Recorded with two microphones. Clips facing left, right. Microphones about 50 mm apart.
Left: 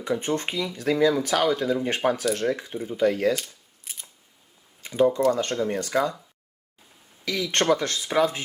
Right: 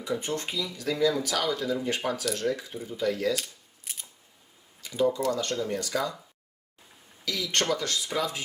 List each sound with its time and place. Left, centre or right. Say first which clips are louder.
0.0 s speech: left 5 dB; left
3.4 s a sound: even; centre
4.8 s speech: left 5 dB; left
7.3 s speech: left 5 dB; left